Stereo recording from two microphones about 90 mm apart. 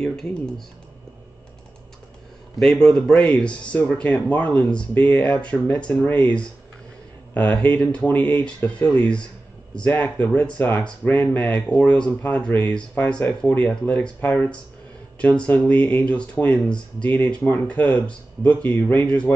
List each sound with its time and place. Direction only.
0.0 s speech: 5° left (ahead or behind)
2.6 s speech: 5° left (ahead or behind)